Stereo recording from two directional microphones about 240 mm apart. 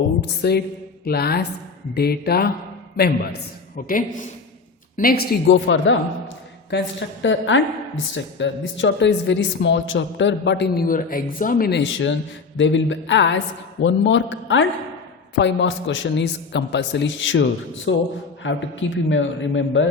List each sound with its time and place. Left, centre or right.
0.2 s a woman's voice: left
3.8 s a woman's voice: left